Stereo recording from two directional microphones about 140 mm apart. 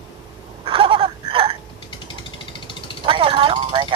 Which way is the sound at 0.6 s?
40° right (ahead or behind).